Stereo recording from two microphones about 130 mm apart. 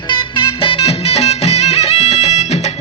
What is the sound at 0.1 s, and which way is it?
Music, 40° left (ahead or behind).